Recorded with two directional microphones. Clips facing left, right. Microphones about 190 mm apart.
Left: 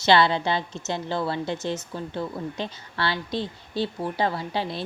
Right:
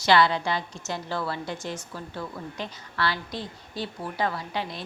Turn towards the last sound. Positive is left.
turn(degrees=30)  # may be behind; listen again after turning